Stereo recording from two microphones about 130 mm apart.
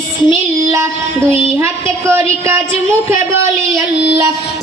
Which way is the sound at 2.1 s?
20° right (ahead or behind).